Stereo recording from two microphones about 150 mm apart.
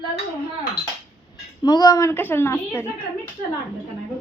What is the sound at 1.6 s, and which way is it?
A woman's voice, 25° left (ahead or behind).